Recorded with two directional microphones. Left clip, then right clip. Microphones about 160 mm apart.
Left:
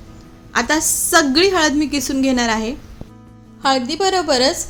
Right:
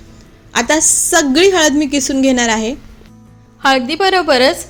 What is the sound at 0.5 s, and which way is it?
A woman's voice, 15° right (ahead or behind).